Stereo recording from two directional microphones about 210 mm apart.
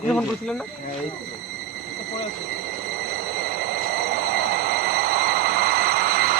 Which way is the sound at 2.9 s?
50° right (ahead or behind).